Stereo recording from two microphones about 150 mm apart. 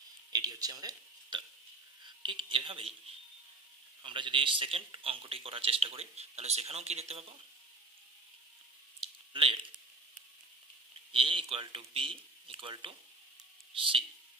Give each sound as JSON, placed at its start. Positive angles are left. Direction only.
{"t": 0.3, "sound": "a sound", "side_deg": -25}
{"t": 2.2, "sound": "a man's voice", "side_deg": -35}
{"t": 4.0, "sound": "a man's voice", "side_deg": -35}
{"t": 9.3, "sound": "speech", "side_deg": -35}
{"t": 11.1, "sound": "a man's voice", "side_deg": -35}